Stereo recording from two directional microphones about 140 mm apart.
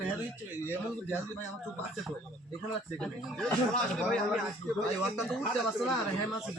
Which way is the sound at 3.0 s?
5° left (ahead or behind).